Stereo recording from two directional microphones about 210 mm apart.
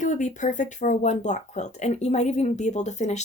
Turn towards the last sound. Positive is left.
turn(degrees=35)  # may be behind; listen again after turning